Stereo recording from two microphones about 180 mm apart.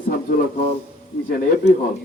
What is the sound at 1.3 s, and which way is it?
Speech, 50° left (ahead or behind).